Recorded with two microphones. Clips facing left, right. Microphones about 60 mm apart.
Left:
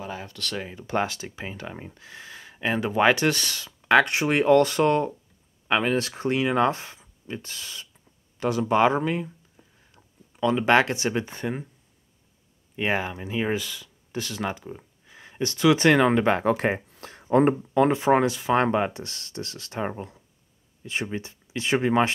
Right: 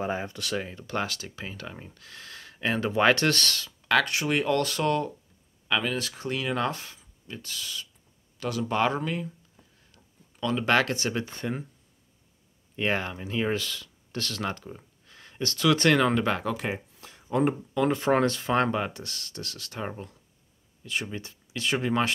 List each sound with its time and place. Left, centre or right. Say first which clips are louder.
0.0 s speech: right 5 dB; right
0.4 s speech: right 1 dB; centre
0.8 s speech: left 5 dB; left
12.7 s speech: left 2 dB; centre; by 16.5 s left
16.5 s speech: left 7 dB; left
16.9 s a sound: left 7 dB; left
17.9 s speech: left 3 dB; centre
18.6 s speech: left 3 dB; left